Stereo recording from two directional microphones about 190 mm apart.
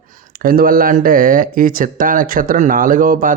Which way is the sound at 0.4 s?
50° right (ahead or behind).